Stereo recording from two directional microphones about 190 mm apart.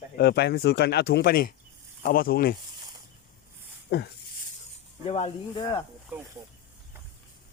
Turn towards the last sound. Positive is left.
turn(degrees=30)  # may be behind; listen again after turning